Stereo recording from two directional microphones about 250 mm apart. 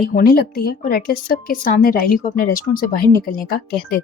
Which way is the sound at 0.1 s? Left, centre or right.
Left.